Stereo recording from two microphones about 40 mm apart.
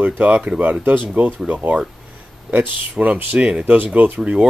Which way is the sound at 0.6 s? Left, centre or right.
Right.